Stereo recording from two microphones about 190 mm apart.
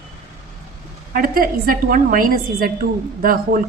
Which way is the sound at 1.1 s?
50° right (ahead or behind).